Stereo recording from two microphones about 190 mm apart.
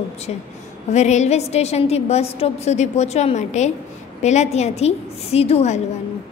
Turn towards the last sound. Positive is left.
turn(degrees=35)  # may be behind; listen again after turning